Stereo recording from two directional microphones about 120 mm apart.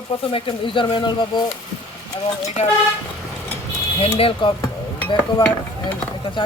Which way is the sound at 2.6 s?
60° left (ahead or behind).